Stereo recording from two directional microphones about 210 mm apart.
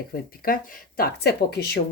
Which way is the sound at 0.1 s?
45° left (ahead or behind).